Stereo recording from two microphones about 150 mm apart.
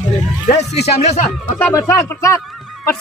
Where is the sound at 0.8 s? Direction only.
45° left (ahead or behind).